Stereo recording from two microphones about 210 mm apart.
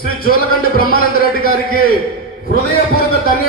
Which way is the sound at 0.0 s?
45° left (ahead or behind).